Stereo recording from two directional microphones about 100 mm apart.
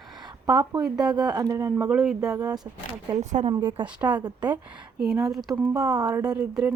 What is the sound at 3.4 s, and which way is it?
Speech, 90° right.